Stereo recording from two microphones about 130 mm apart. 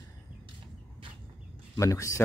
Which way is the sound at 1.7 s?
25° left (ahead or behind).